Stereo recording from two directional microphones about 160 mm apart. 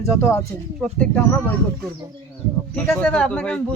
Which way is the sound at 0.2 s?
15° left (ahead or behind).